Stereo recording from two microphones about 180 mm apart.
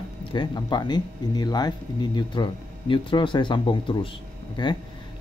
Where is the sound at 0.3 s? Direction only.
25° left (ahead or behind).